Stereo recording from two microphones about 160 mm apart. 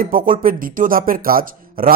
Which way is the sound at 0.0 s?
60° right (ahead or behind).